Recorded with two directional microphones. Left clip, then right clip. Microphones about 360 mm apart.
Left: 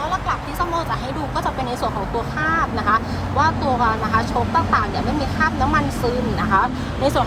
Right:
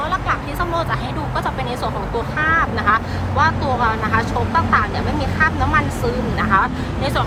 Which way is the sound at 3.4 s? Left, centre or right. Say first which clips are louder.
Right 1 dB; centre.